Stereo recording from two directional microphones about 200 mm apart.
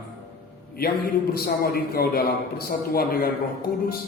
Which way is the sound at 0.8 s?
50° left (ahead or behind).